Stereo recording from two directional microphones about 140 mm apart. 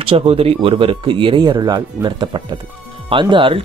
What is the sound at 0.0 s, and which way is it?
Speech, 45° right (ahead or behind).